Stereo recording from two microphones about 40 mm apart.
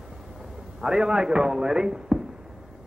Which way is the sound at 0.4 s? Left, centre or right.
Centre.